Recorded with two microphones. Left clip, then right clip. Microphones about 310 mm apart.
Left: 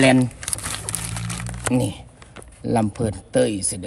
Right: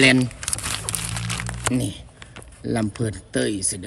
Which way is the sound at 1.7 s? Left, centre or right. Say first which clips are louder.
Left 4 dB; left.